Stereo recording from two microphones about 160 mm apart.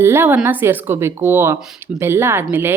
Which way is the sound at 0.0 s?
15° right (ahead or behind).